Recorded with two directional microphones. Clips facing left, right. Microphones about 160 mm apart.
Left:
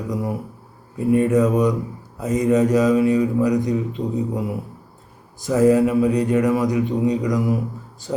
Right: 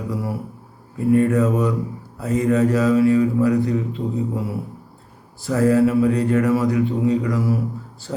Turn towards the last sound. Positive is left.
turn(degrees=15)  # may be behind; listen again after turning